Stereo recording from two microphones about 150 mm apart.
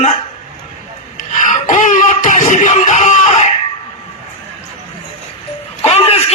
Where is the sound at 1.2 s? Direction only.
55° left (ahead or behind).